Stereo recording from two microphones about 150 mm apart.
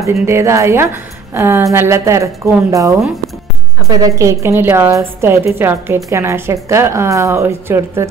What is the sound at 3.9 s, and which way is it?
A woman's voice, 25° right (ahead or behind).